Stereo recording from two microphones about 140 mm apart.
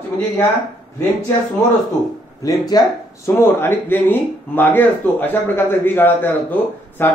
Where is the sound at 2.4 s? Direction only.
25° left (ahead or behind).